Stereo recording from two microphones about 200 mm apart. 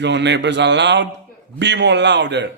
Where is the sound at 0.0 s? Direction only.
60° right (ahead or behind).